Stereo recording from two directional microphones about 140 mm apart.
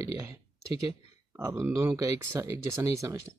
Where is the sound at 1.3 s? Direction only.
15° right (ahead or behind).